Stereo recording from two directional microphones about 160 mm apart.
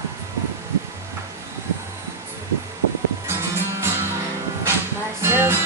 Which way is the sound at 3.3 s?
15° right (ahead or behind).